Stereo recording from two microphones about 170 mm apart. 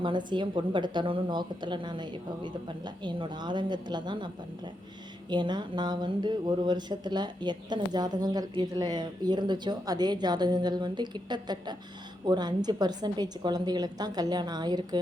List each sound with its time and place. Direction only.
0.0 s speech: 25° right (ahead or behind)
5.3 s speech: 25° right (ahead or behind)